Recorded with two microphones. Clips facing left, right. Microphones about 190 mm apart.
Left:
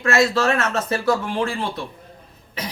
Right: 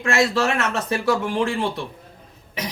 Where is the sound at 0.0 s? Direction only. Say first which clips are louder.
Left 1 dB; 15° right (ahead or behind).